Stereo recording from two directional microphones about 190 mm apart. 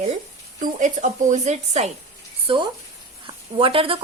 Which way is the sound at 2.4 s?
25° right (ahead or behind).